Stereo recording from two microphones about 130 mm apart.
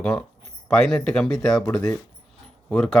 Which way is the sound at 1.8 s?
25° left (ahead or behind).